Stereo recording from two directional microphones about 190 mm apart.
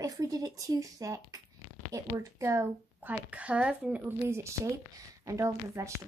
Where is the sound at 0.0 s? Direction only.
20° right (ahead or behind).